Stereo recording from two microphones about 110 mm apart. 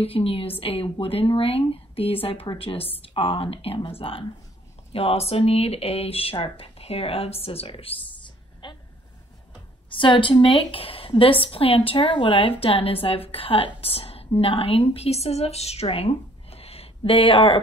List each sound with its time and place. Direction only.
0.0 s a woman's voice: 60° left (ahead or behind)
4.9 s a woman's voice: 65° left (ahead or behind)
8.6 s a sound: 45° left (ahead or behind)
9.9 s a woman's voice: 50° left (ahead or behind)